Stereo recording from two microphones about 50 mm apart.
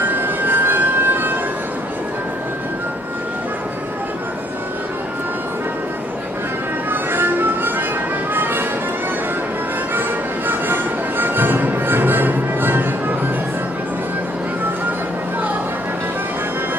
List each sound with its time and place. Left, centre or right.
0.0 s music: right
6.9 s music: right
9.9 s music: right